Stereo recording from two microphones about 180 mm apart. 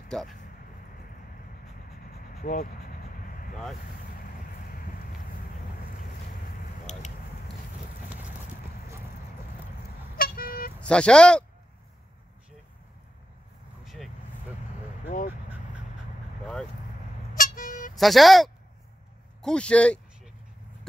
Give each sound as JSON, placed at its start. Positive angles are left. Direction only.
{"t": 0.1, "sound": "speech", "side_deg": 5}
{"t": 1.9, "sound": "vehicle", "side_deg": 55}
{"t": 10.1, "sound": "vehicle", "side_deg": 55}
{"t": 10.8, "sound": "speech", "side_deg": 5}
{"t": 13.8, "sound": "vehicle", "side_deg": 0}
{"t": 15.0, "sound": "speech", "side_deg": 45}
{"t": 17.3, "sound": "vehicle", "side_deg": 50}
{"t": 17.9, "sound": "speech", "side_deg": 0}